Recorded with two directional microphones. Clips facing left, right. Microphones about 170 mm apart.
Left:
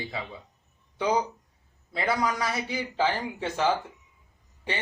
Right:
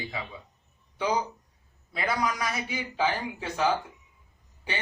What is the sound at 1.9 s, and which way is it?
A man's voice, 25° left (ahead or behind).